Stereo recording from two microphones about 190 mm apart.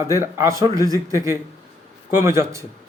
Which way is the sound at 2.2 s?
15° right (ahead or behind).